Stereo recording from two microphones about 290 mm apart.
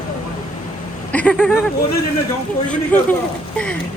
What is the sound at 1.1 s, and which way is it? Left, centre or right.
Vehicle, centre.